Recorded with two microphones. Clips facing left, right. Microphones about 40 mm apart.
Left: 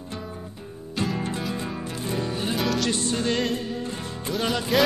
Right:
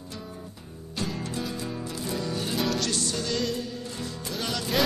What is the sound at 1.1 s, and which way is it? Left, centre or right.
Music, left.